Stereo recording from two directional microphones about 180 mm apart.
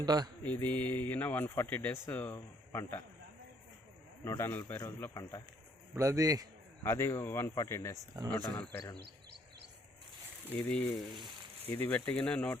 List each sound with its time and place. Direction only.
0.0 s speech: 20° right (ahead or behind)
0.4 s speech: 10° left (ahead or behind)
4.2 s speech: 15° left (ahead or behind)
5.9 s a man's voice: 15° right (ahead or behind)
6.8 s speech: 15° left (ahead or behind)
7.9 s speech: 20° right (ahead or behind)
8.3 s speech: 5° left (ahead or behind)
9.0 s insect: 65° right (ahead or behind)
10.6 s speech: 5° left (ahead or behind)